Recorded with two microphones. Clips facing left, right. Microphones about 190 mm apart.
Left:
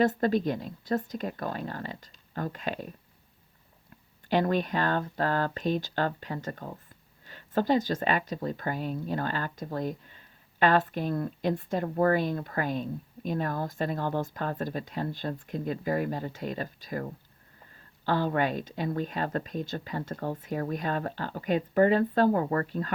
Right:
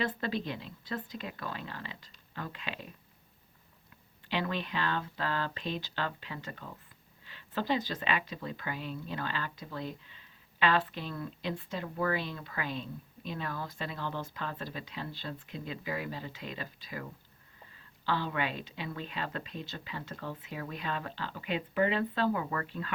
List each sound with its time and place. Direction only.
0.0 s speech: 45° left (ahead or behind)
4.3 s speech: 45° left (ahead or behind)